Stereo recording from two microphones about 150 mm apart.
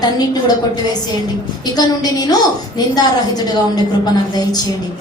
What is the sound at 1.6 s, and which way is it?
A woman's voice, 25° left (ahead or behind).